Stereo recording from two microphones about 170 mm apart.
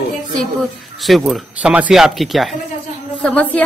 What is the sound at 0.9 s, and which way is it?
Speech, centre (ahead or behind).